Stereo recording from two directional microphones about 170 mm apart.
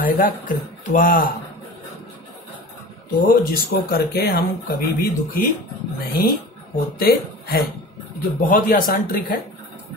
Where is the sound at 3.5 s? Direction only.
65° left (ahead or behind).